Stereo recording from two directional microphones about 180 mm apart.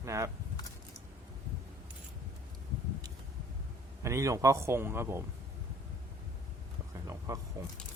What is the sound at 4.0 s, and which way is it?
A man's voice, 15° right (ahead or behind).